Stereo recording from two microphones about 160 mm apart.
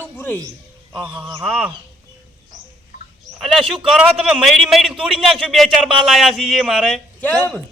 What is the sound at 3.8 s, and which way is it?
A man's voice, 5° right (ahead or behind).